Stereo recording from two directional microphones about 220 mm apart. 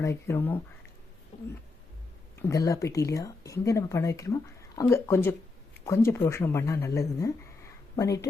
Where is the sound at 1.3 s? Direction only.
30° left (ahead or behind).